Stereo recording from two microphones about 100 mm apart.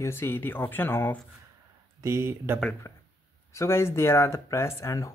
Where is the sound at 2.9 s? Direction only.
35° left (ahead or behind).